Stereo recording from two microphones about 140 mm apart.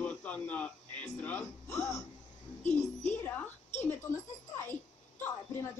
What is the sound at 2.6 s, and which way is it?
Speech, 55° left (ahead or behind).